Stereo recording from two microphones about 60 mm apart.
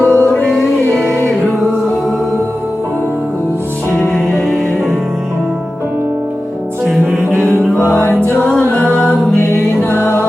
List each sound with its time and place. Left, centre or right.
0.0 s music: left
3.9 s music: centre
8.7 s music: left
9.4 s music: left